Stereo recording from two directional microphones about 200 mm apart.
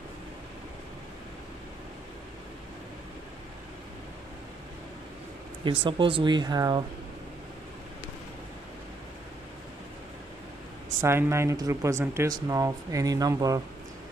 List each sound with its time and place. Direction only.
5.7 s speech: 25° right (ahead or behind)
11.0 s speech: 15° right (ahead or behind)